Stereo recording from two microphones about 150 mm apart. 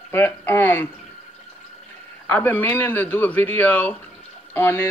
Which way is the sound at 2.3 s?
15° left (ahead or behind).